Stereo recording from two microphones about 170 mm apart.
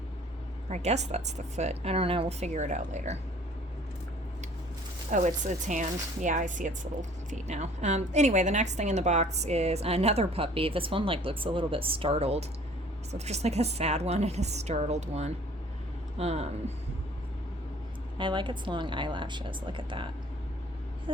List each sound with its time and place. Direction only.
0.7 s a woman's voice: 40° right (ahead or behind)
5.1 s a woman's voice: 45° right (ahead or behind)
18.2 s speech: 30° right (ahead or behind)